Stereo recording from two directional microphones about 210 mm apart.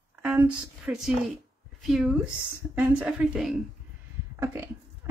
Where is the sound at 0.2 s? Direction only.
5° right (ahead or behind).